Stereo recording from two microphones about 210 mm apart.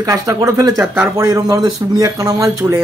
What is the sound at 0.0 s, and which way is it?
A man's voice, 15° right (ahead or behind).